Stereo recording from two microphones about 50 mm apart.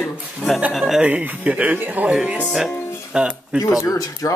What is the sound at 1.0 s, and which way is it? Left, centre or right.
Speech, right.